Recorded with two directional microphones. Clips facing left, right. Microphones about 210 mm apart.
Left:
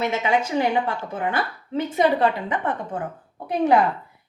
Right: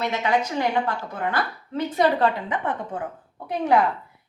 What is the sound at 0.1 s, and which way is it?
Speech, 25° left (ahead or behind).